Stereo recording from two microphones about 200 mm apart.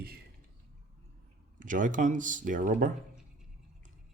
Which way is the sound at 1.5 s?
40° right (ahead or behind).